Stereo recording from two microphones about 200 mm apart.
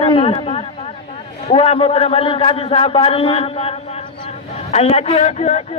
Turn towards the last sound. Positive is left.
turn(degrees=35)  # may be behind; listen again after turning